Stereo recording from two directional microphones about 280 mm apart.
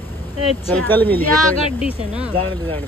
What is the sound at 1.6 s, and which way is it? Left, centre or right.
Speech, centre.